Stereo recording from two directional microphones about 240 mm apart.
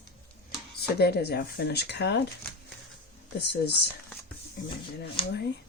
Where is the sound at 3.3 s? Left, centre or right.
Left.